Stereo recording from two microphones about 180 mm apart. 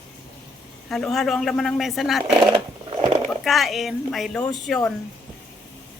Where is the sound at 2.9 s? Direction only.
25° right (ahead or behind).